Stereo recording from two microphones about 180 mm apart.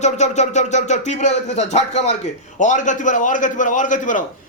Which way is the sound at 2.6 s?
45° left (ahead or behind).